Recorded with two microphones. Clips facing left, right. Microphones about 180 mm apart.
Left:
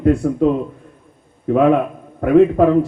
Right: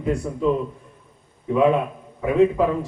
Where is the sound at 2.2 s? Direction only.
65° left (ahead or behind).